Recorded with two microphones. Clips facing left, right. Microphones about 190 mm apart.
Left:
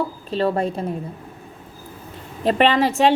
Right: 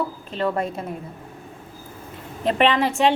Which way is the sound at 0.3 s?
30° left (ahead or behind).